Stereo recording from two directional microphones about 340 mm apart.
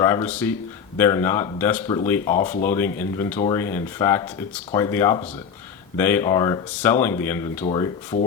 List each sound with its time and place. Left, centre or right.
0.0 s speech: centre